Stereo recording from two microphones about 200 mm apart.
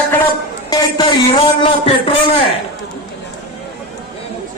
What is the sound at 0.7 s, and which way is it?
Speech, 20° left (ahead or behind).